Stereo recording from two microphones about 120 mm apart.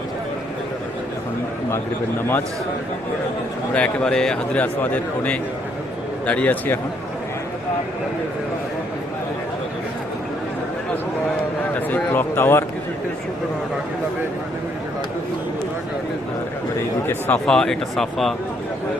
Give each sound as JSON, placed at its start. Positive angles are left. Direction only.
{"t": 3.8, "sound": "a man's voice", "side_deg": 10}
{"t": 11.9, "sound": "a man's voice", "side_deg": 15}
{"t": 17.1, "sound": "a man's voice", "side_deg": 15}
{"t": 17.4, "sound": "speech", "side_deg": 5}